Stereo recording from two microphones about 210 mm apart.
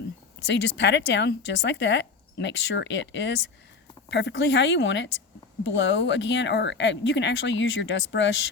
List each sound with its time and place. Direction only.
0.4 s speech: 55° left (ahead or behind)